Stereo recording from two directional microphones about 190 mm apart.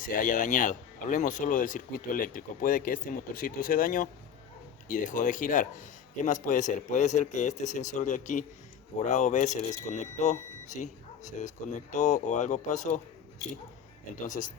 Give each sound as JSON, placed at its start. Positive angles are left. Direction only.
{"t": 0.0, "sound": "a man's voice", "side_deg": 45}
{"t": 14.3, "sound": "speech", "side_deg": 40}